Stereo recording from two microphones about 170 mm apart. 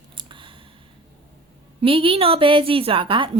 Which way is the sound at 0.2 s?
30° right (ahead or behind).